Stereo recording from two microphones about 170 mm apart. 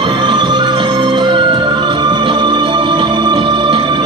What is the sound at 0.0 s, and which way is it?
Music, 25° right (ahead or behind).